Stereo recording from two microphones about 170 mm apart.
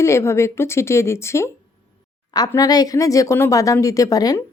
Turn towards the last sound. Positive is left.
turn(degrees=20)  # may be behind; listen again after turning